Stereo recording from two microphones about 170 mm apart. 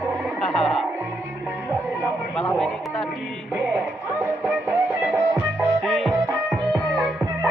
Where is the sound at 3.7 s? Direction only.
10° right (ahead or behind).